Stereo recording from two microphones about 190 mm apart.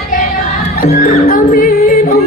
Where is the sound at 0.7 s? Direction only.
50° left (ahead or behind).